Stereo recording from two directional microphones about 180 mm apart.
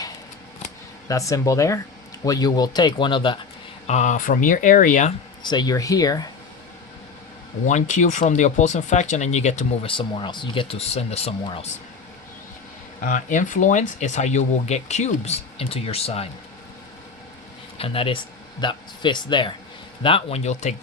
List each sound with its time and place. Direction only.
1.0 s speech: 20° left (ahead or behind)
3.8 s speech: 40° left (ahead or behind)
5.4 s speech: 25° left (ahead or behind)
7.7 s speech: 40° left (ahead or behind)
13.0 s speech: 45° left (ahead or behind)
17.7 s speech: 30° left (ahead or behind)